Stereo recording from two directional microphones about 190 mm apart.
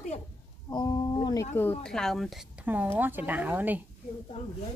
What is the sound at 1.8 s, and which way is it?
A woman's voice, 5° left (ahead or behind).